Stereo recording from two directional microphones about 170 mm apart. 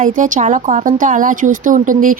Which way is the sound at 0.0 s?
50° right (ahead or behind).